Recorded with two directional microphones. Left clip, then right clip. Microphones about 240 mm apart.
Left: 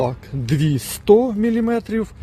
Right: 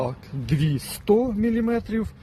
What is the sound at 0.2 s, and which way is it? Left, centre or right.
Speech, left.